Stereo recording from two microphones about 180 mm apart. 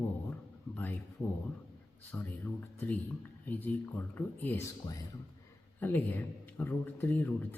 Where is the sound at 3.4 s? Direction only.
10° left (ahead or behind).